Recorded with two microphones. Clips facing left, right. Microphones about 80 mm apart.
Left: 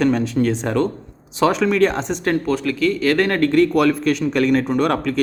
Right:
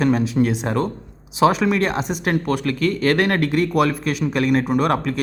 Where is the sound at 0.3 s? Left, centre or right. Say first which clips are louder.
Left 1 dB; centre.